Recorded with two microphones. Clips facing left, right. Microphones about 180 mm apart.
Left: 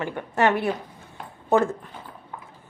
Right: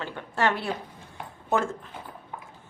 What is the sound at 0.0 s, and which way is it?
Speech, 15° left (ahead or behind).